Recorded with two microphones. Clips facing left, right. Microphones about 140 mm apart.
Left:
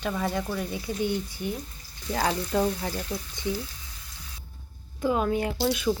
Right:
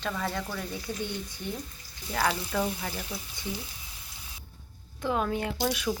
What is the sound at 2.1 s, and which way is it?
Speech, 30° left (ahead or behind).